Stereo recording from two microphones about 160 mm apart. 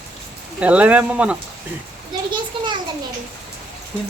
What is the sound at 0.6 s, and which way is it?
Speech, 10° right (ahead or behind).